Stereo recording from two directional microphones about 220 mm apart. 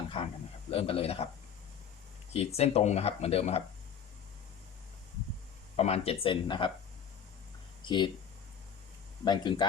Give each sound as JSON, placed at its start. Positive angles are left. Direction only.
{"t": 0.1, "sound": "a sound", "side_deg": 25}
{"t": 0.7, "sound": "speech", "side_deg": 25}
{"t": 2.3, "sound": "speech", "side_deg": 30}
{"t": 5.7, "sound": "speech", "side_deg": 25}
{"t": 7.9, "sound": "speech", "side_deg": 20}
{"t": 9.2, "sound": "speech", "side_deg": 20}